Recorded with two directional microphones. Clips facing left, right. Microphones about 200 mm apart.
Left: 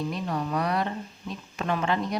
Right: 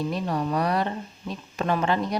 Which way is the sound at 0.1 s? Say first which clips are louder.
Right 3 dB; 35° right (ahead or behind).